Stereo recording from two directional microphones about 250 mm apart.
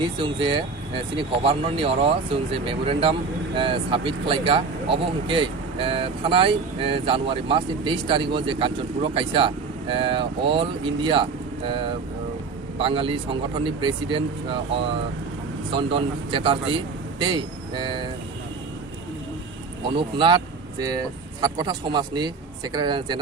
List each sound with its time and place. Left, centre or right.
0.2 s speech: centre
15.7 s speech: centre
20.0 s speech: centre